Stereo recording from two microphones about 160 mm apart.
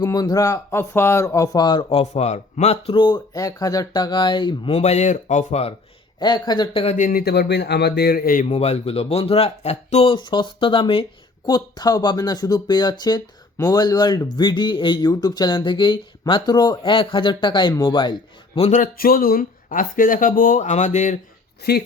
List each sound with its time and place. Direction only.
0.0 s speech: 25° left (ahead or behind)
4.7 s speech: 45° left (ahead or behind)
6.1 s speech: 25° left (ahead or behind)
6.8 s speech: 55° left (ahead or behind)
8.4 s speech: 40° left (ahead or behind)
18.7 s speech: 60° left (ahead or behind)
21.6 s speech: 85° left